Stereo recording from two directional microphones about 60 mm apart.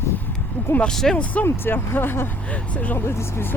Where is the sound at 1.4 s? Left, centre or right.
Left.